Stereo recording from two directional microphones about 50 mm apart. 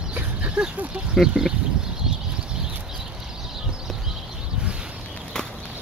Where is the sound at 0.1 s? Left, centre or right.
Right.